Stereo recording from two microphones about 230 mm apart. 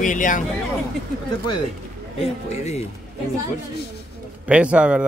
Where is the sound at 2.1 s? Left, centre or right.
Left.